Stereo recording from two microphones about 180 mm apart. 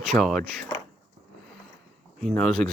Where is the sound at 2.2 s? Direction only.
Centre (ahead or behind).